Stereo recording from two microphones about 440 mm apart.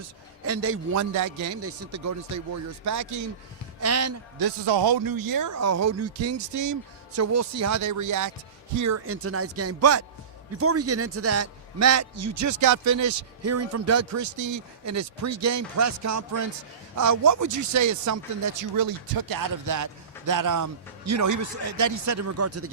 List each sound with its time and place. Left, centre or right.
0.4 s a man's voice: right
4.4 s a man's voice: right